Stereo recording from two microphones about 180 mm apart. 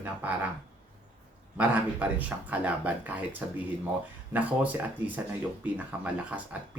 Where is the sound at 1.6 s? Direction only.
10° right (ahead or behind).